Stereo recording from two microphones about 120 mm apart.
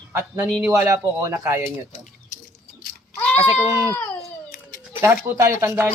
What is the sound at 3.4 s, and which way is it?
Speech, 25° right (ahead or behind).